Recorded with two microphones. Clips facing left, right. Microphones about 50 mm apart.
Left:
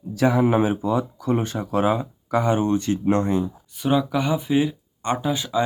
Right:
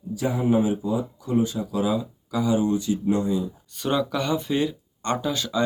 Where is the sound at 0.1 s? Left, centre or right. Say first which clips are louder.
Left 4 dB; left.